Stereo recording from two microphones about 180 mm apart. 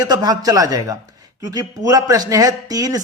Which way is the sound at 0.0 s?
20° right (ahead or behind).